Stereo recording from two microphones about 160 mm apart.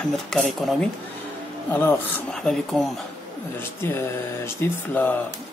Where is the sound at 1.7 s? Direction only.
15° left (ahead or behind).